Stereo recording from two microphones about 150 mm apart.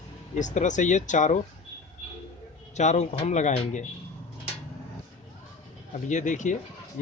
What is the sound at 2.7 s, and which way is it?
Speech, 50° left (ahead or behind).